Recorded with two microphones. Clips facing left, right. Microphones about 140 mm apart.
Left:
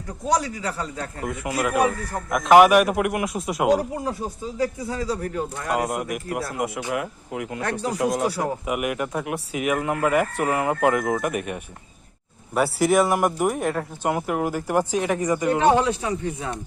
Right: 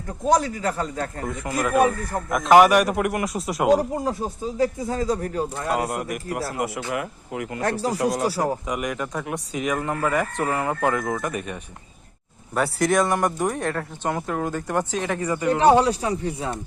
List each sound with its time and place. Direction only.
0.3 s speech: 50° right (ahead or behind)
1.2 s speech: 5° left (ahead or behind)
3.8 s speech: 40° right (ahead or behind)
5.7 s speech: 5° left (ahead or behind)
7.6 s speech: 35° right (ahead or behind)
7.9 s speech: centre (ahead or behind)
15.5 s speech: 35° right (ahead or behind)